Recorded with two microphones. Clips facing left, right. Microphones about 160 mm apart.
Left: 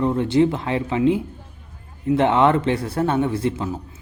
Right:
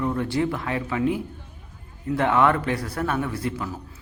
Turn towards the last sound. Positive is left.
turn(degrees=25)  # may be behind; listen again after turning